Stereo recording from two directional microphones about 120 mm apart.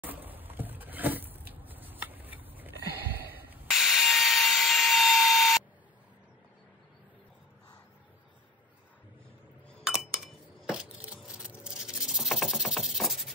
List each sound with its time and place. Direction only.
0.0 s a sound: 15° right (ahead or behind)
3.7 s tools: centre (ahead or behind)
9.8 s chink: 5° right (ahead or behind)